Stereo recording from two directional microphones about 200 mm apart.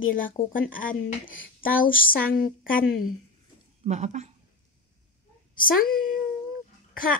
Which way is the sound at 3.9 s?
35° right (ahead or behind).